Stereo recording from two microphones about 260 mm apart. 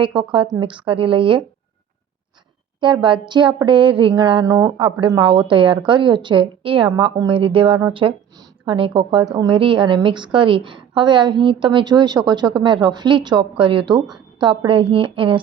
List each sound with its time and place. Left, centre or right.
0.0 s a woman's voice: centre
2.8 s a woman's voice: centre